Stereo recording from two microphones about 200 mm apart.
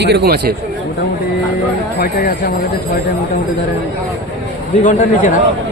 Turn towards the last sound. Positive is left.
turn(degrees=40)  # may be behind; listen again after turning